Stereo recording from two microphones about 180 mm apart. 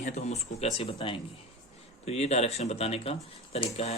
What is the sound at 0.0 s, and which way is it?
Speech, 40° left (ahead or behind).